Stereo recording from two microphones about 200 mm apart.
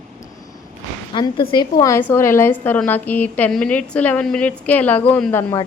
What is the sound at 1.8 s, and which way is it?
A woman's voice, 10° left (ahead or behind).